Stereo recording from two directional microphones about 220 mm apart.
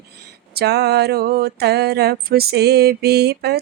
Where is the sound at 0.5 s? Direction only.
50° right (ahead or behind).